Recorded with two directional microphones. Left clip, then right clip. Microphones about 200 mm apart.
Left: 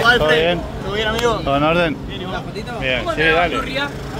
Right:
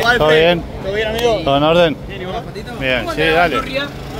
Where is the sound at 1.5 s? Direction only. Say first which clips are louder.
Right 6 dB; 15° right (ahead or behind).